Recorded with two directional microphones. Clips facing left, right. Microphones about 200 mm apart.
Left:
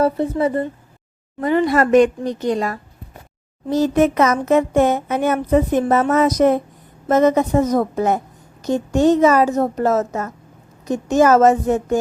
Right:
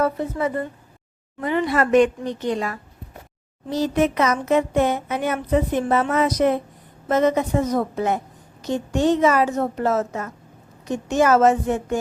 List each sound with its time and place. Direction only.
0.0 s a woman's voice: 30° left (ahead or behind)
3.7 s a sound: 45° left (ahead or behind)
8.6 s a woman's voice: 45° left (ahead or behind)